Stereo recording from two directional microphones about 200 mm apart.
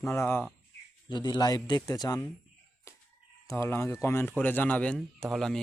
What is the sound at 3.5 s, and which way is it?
Speech, 10° left (ahead or behind).